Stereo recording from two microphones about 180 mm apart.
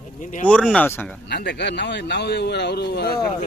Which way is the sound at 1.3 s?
70° left (ahead or behind).